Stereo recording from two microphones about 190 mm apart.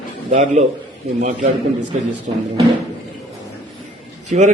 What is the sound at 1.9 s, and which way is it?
Speech, 40° right (ahead or behind).